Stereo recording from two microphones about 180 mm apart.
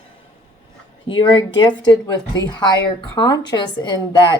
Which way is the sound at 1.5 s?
25° left (ahead or behind).